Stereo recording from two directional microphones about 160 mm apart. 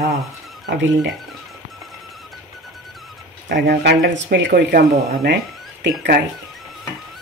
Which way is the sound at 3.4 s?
90° right.